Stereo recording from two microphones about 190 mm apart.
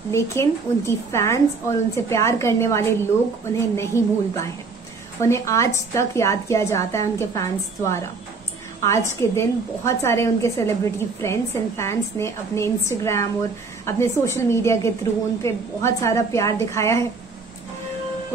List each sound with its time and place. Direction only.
0.1 s a woman's voice: 15° left (ahead or behind)